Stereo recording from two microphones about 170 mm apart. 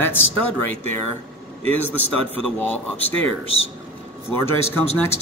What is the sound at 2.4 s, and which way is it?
Speech, 10° left (ahead or behind).